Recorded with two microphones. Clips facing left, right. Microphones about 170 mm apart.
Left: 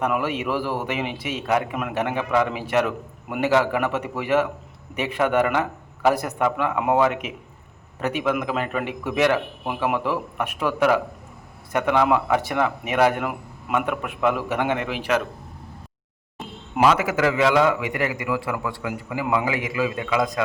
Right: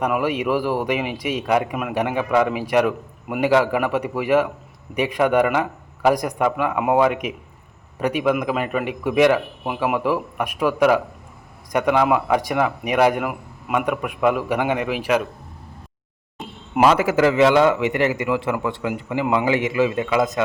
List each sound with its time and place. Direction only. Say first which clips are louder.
0.0 s a man's voice: right 3 dB; 15° right (ahead or behind)
16.8 s a man's voice: right 3 dB; 30° right (ahead or behind)